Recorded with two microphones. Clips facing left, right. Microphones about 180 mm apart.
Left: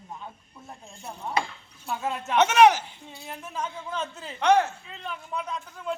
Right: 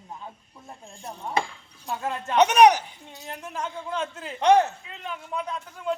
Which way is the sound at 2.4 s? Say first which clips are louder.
Right 2 dB; 15° right (ahead or behind).